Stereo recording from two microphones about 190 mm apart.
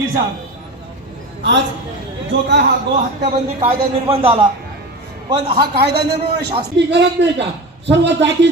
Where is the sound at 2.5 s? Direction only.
60° right (ahead or behind).